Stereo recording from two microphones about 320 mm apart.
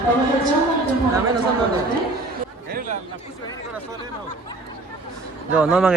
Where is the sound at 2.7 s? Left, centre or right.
Right.